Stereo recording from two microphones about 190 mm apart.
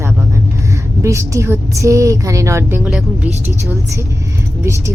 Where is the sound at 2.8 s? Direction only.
5° right (ahead or behind).